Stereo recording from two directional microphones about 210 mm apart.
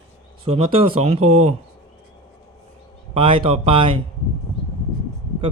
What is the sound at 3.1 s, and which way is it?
Speech, 25° right (ahead or behind).